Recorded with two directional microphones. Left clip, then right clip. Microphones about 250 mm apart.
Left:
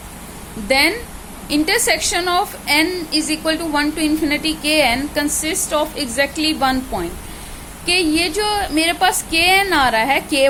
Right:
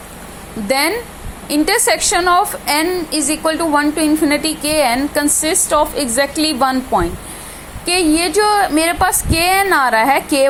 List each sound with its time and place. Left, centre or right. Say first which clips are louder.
0.7 s a woman's voice: even; centre